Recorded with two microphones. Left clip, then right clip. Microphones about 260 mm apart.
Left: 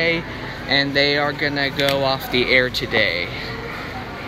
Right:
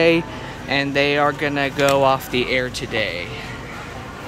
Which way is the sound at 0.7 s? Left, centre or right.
Centre.